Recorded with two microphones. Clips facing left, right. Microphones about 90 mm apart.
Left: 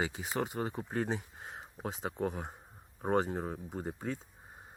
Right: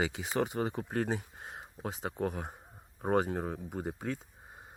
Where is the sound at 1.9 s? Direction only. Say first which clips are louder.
Right 1 dB; centre (ahead or behind).